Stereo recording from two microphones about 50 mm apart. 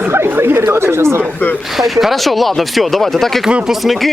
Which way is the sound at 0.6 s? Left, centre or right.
Right.